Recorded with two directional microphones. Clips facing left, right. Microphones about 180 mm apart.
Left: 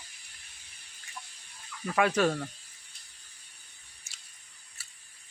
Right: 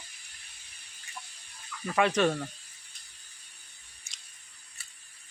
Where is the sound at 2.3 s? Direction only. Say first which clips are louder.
Even; 5° right (ahead or behind).